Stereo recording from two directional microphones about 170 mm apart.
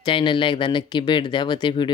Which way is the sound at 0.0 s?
30° left (ahead or behind).